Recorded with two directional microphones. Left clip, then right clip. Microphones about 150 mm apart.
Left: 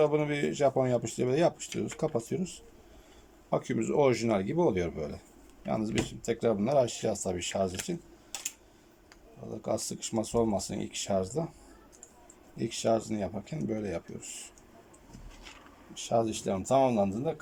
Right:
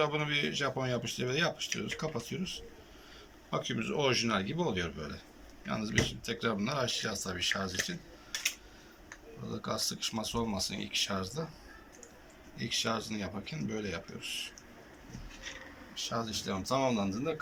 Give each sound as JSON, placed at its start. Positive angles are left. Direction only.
{"t": 0.0, "sound": "speech", "side_deg": 55}
{"t": 9.5, "sound": "speech", "side_deg": 55}
{"t": 12.5, "sound": "speech", "side_deg": 55}
{"t": 16.0, "sound": "speech", "side_deg": 60}